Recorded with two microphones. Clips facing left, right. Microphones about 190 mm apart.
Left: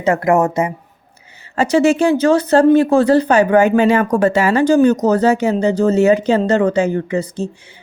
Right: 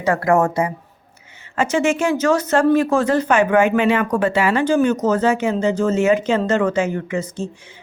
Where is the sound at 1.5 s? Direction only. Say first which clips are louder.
Left 5 dB; 35° left (ahead or behind).